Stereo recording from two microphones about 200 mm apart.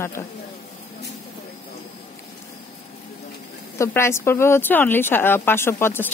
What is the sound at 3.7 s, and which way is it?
A woman's voice, 15° left (ahead or behind).